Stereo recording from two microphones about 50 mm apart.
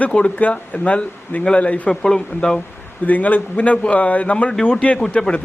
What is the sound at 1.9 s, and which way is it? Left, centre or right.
Speech, centre.